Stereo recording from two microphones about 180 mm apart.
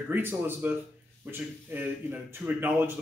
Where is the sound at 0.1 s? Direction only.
10° right (ahead or behind).